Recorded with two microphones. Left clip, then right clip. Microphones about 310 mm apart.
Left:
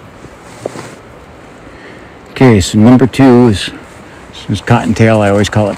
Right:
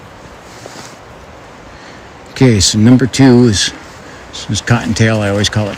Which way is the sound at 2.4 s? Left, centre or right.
Centre.